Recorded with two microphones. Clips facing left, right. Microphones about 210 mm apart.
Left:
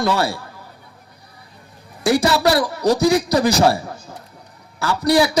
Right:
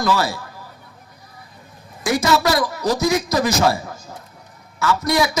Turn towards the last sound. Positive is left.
turn(degrees=35)  # may be behind; listen again after turning